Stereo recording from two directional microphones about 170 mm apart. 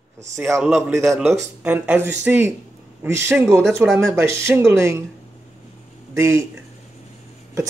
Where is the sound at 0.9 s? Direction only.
15° right (ahead or behind).